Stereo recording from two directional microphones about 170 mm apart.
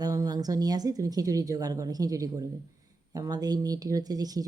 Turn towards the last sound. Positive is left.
turn(degrees=-20)  # may be behind; listen again after turning